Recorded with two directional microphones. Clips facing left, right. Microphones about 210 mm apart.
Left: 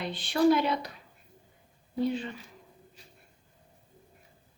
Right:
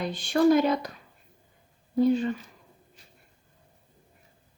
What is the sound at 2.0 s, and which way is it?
Speech, 45° right (ahead or behind).